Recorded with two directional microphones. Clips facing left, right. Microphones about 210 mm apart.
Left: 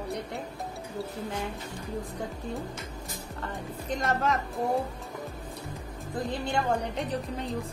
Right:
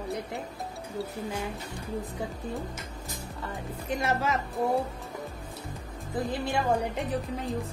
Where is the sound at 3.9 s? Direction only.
10° right (ahead or behind).